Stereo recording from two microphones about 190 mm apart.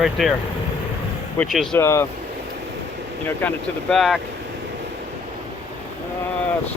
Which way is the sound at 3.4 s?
10° left (ahead or behind).